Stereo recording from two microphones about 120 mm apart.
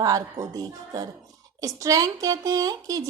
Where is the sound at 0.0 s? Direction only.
30° right (ahead or behind).